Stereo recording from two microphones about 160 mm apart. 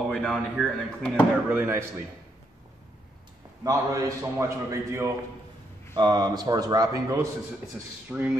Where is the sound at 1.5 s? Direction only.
15° right (ahead or behind).